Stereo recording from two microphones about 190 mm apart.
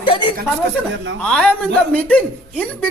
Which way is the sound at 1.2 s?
5° left (ahead or behind).